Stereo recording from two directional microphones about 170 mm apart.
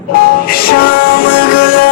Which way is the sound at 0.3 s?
60° left (ahead or behind).